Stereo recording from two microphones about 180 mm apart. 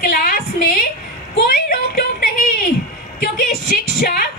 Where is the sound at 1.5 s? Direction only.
55° left (ahead or behind).